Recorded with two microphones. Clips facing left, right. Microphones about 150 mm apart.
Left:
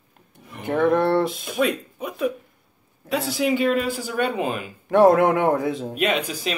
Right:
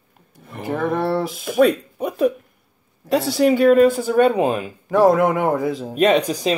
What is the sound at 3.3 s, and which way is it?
Speech, 40° right (ahead or behind).